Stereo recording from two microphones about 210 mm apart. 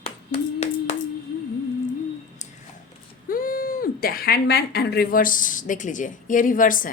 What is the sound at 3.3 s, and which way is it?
Speech, 45° left (ahead or behind).